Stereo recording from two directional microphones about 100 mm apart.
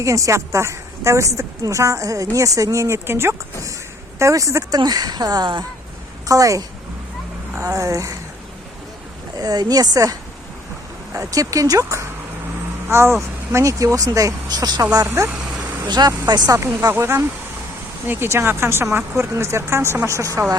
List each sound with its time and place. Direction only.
0.0 s a woman's voice: 30° right (ahead or behind)
6.2 s a woman's voice: 35° right (ahead or behind)
9.4 s a woman's voice: 40° right (ahead or behind)
15.0 s a woman's voice: 25° right (ahead or behind)
15.9 s speech: 45° right (ahead or behind)
16.6 s a woman's voice: 25° right (ahead or behind)